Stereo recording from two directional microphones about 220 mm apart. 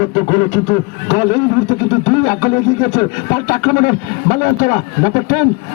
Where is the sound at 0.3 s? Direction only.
30° left (ahead or behind).